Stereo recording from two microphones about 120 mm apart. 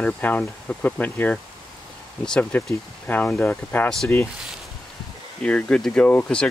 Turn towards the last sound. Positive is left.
turn(degrees=10)  # may be behind; listen again after turning